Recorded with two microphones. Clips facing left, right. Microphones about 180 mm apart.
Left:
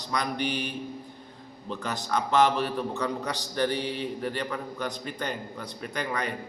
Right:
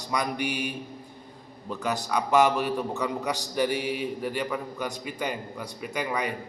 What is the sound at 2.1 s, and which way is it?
A man's voice, 10° right (ahead or behind).